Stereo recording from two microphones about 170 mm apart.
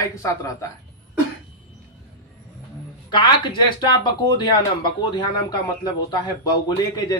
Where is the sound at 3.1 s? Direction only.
25° left (ahead or behind).